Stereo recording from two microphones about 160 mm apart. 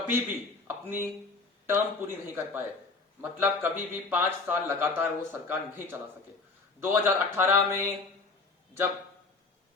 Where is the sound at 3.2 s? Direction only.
10° right (ahead or behind).